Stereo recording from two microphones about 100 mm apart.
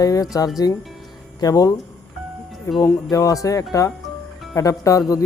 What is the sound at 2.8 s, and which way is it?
Speech, 40° left (ahead or behind).